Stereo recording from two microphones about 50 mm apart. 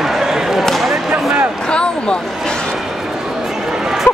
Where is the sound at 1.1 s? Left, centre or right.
Right.